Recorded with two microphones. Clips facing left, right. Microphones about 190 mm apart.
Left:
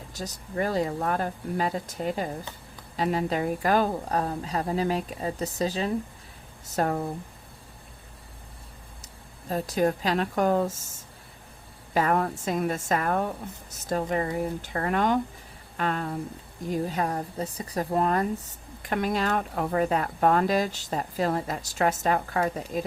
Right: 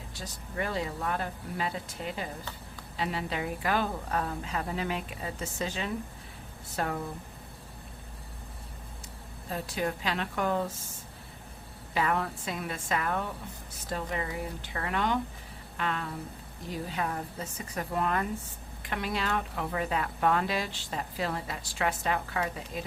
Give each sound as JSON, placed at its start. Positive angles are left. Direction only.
{"t": 0.1, "sound": "speech", "side_deg": 40}
{"t": 9.5, "sound": "speech", "side_deg": 40}
{"t": 11.9, "sound": "speech", "side_deg": 45}